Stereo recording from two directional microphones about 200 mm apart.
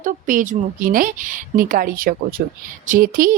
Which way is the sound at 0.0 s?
40° right (ahead or behind).